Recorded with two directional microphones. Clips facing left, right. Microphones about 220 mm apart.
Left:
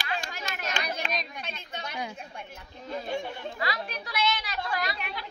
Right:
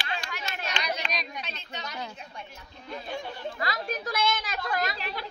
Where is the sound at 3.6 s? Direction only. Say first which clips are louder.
Right 2 dB; 45° right (ahead or behind).